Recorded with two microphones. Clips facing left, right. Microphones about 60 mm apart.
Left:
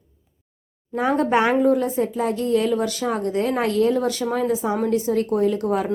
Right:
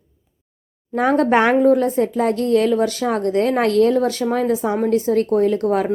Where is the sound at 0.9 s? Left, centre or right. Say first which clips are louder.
Right 4 dB; right.